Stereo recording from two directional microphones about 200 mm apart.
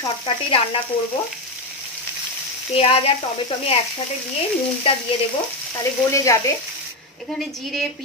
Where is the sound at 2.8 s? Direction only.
30° left (ahead or behind).